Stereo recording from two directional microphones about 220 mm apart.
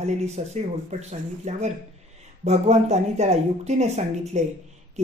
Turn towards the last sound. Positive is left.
turn(degrees=-30)  # may be behind; listen again after turning